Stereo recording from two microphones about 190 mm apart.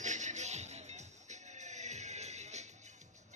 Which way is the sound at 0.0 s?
40° right (ahead or behind).